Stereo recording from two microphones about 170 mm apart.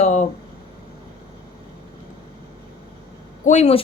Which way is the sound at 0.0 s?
45° left (ahead or behind).